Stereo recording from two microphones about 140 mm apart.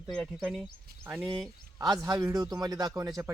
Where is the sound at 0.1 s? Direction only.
Centre (ahead or behind).